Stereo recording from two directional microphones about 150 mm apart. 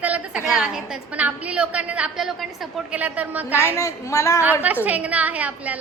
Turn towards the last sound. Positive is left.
turn(degrees=-10)  # may be behind; listen again after turning